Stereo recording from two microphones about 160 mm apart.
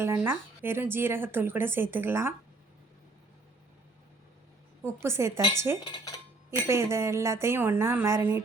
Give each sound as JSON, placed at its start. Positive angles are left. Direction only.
{"t": 0.0, "sound": "speech", "side_deg": -15}
{"t": 4.8, "sound": "speech", "side_deg": -15}